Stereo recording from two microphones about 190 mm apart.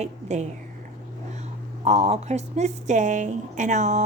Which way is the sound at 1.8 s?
35° right (ahead or behind).